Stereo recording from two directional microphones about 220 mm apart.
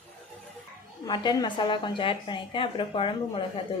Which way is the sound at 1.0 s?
20° left (ahead or behind).